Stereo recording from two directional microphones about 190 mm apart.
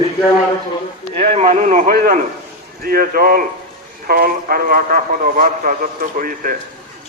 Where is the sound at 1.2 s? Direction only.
35° right (ahead or behind).